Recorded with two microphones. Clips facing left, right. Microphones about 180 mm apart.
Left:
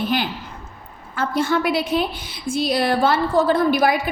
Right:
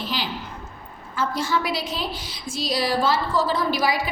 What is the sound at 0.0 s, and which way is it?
A woman's voice, 55° left (ahead or behind).